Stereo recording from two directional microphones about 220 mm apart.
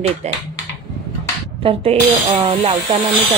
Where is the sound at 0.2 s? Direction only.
30° right (ahead or behind).